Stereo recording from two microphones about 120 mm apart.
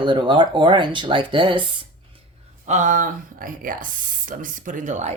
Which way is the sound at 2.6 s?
85° right.